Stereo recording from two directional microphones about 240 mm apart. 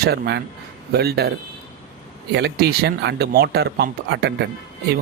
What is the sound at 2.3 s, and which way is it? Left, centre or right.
Speech, right.